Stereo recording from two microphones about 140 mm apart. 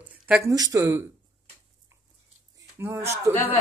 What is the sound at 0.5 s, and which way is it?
Speech, 25° right (ahead or behind).